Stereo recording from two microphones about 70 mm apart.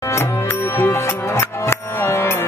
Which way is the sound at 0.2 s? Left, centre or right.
Left.